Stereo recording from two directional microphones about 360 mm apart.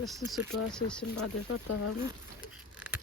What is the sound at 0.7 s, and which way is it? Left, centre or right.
Speech, centre.